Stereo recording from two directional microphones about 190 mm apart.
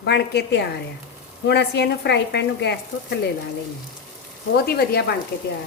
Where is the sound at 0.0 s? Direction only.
60° left (ahead or behind).